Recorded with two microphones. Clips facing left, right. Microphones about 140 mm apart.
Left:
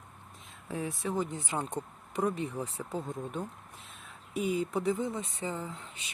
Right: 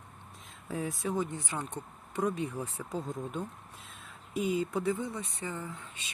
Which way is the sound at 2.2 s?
Centre (ahead or behind).